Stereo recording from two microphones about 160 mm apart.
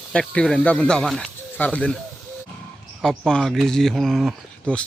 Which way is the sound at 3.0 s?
5° left (ahead or behind).